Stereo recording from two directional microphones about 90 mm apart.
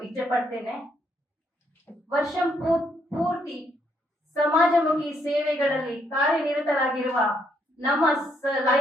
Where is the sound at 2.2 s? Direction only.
Centre (ahead or behind).